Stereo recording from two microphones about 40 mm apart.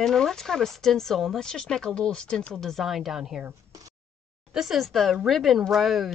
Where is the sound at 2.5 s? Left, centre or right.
Centre.